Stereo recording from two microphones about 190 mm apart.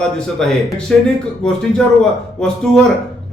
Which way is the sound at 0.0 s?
5° left (ahead or behind).